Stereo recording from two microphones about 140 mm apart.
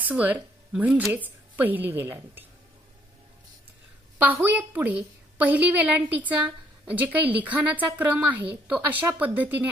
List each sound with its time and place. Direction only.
0.0 s a woman's voice: 10° right (ahead or behind)
4.2 s a woman's voice: 10° right (ahead or behind)